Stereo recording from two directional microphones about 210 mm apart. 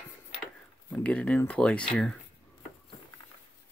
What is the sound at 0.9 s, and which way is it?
Speech, 5° left (ahead or behind).